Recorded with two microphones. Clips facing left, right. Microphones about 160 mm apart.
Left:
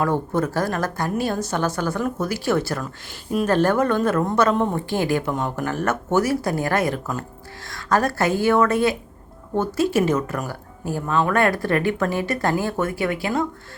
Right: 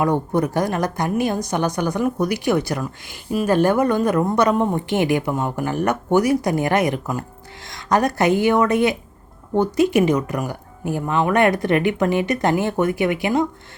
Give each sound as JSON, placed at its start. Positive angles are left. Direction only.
{"t": 0.0, "sound": "speech", "side_deg": -15}